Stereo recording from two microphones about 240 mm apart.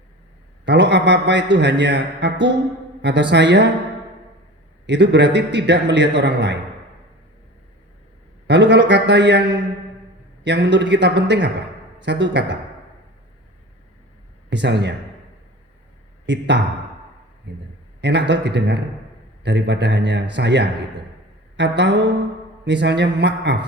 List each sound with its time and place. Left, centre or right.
0.6 s a man's voice: right
4.9 s a man's voice: right
8.4 s a man's voice: right
14.5 s a man's voice: right
16.2 s a man's voice: right